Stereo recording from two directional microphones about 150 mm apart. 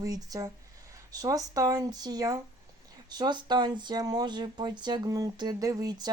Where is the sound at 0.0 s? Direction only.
25° right (ahead or behind).